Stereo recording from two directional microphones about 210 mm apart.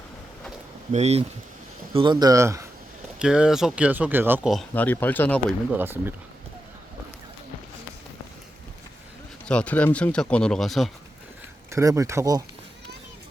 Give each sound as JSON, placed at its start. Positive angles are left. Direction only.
{"t": 0.9, "sound": "speech", "side_deg": -30}
{"t": 3.2, "sound": "speech", "side_deg": -5}
{"t": 4.7, "sound": "speech", "side_deg": 10}
{"t": 5.7, "sound": "speech", "side_deg": -10}
{"t": 9.5, "sound": "speech", "side_deg": 5}
{"t": 11.7, "sound": "speech", "side_deg": -15}